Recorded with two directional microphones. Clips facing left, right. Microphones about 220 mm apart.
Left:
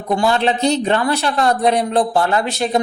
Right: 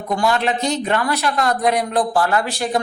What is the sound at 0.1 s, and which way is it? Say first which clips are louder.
Speech: left 3 dB; 30° left (ahead or behind).